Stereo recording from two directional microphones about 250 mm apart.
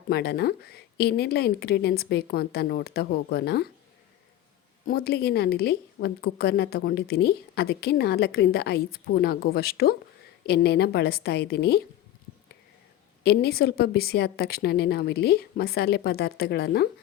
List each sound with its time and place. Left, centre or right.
0.1 s a woman's voice: left
4.9 s a woman's voice: left
13.2 s a woman's voice: left